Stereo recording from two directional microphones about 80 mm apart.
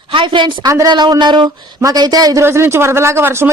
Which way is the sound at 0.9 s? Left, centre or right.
Right.